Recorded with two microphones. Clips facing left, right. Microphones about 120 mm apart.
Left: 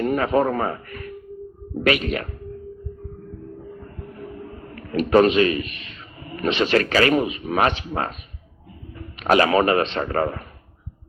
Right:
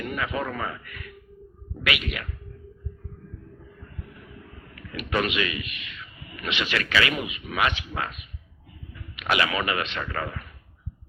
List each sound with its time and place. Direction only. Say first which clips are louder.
0.0 s speech: left 10 dB; 40° left (ahead or behind)
3.8 s a sound: left 8 dB; 40° left (ahead or behind)
9.0 s a man's voice: left 8 dB; 40° left (ahead or behind)